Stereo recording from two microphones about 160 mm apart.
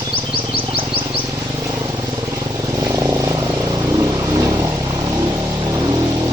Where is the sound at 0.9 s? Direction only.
35° right (ahead or behind).